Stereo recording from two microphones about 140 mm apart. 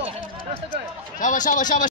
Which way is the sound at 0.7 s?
70° left (ahead or behind).